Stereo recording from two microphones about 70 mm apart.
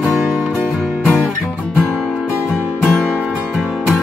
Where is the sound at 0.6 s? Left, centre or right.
Centre.